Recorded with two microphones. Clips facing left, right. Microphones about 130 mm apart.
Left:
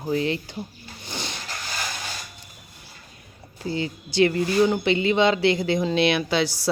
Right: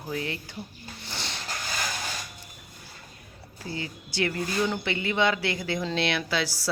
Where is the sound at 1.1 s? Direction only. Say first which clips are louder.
Left 5 dB; 15° left (ahead or behind).